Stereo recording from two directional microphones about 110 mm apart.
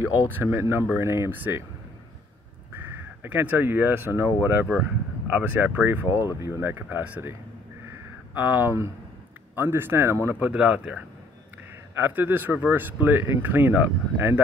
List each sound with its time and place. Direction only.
0.0 s speech: 20° right (ahead or behind)
2.7 s speech: 20° right (ahead or behind)
8.4 s speech: 20° right (ahead or behind)
10.5 s speech: 10° right (ahead or behind)
12.0 s speech: 15° right (ahead or behind)